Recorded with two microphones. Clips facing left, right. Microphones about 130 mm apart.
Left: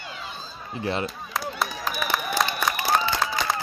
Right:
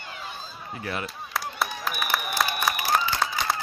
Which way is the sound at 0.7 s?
25° left (ahead or behind).